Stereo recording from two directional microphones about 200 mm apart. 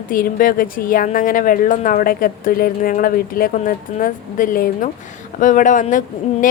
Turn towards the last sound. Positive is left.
turn(degrees=40)  # may be behind; listen again after turning